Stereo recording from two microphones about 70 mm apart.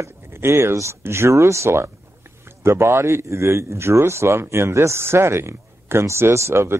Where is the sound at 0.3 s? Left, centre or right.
Right.